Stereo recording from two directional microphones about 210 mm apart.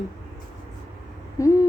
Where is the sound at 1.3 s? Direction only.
15° left (ahead or behind).